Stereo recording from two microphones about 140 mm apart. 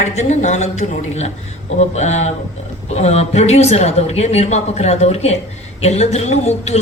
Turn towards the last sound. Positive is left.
turn(degrees=50)  # may be behind; listen again after turning